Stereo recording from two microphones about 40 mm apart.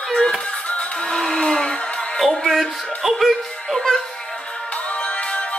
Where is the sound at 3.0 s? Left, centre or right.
Centre.